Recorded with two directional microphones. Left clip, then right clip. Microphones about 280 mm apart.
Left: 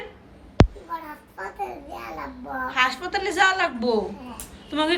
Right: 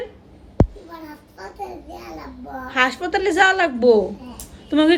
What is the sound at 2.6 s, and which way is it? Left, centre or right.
A woman's voice, centre.